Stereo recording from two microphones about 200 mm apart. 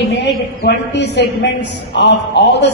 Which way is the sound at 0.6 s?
60° left (ahead or behind).